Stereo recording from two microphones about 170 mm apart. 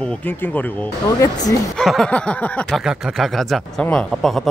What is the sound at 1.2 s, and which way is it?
Speech, 20° left (ahead or behind).